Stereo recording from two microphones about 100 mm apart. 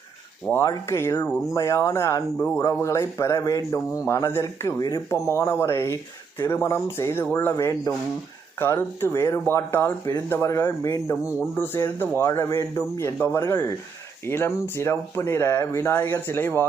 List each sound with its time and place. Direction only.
0.5 s a man's voice: 30° left (ahead or behind)